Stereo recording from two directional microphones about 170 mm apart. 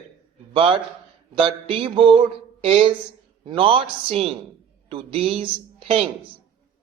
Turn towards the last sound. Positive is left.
turn(degrees=-35)  # may be behind; listen again after turning